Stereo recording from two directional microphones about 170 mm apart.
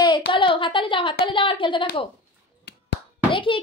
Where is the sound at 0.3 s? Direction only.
30° left (ahead or behind).